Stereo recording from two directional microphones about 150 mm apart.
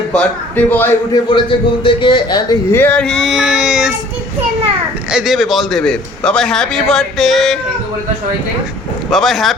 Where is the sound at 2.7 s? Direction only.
10° left (ahead or behind).